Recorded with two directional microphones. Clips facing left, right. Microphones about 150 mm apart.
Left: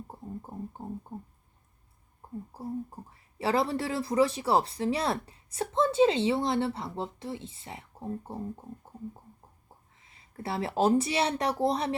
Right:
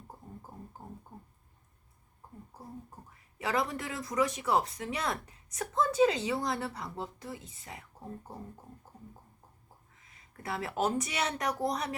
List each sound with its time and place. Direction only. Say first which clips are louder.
0.1 s a sound: left 8 dB; 25° left (ahead or behind)
2.5 s speech: left 11 dB; 30° left (ahead or behind)
10.0 s speech: left 6 dB; 30° left (ahead or behind)